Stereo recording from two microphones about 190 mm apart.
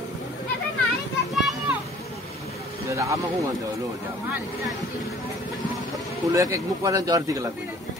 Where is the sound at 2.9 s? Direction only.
15° right (ahead or behind).